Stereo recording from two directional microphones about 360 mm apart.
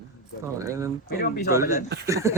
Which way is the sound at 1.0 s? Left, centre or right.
Left.